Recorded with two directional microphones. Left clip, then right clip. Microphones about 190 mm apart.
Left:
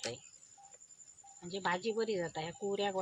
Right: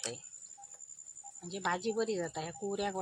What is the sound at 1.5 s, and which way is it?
Speech, 20° right (ahead or behind).